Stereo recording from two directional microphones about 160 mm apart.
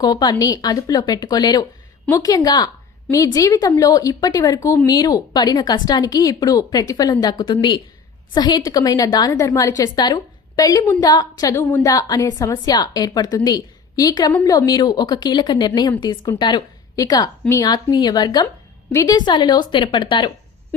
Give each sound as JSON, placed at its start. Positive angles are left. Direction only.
{"t": 0.0, "sound": "a woman's voice", "side_deg": 25}